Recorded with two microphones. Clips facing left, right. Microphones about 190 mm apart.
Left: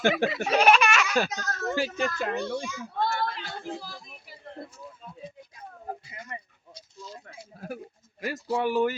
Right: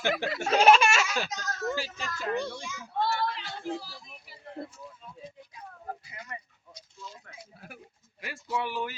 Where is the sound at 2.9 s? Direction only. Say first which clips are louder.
Even; 50° left (ahead or behind).